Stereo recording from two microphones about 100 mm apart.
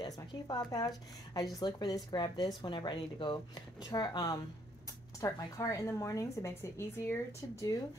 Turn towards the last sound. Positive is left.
turn(degrees=30)  # may be behind; listen again after turning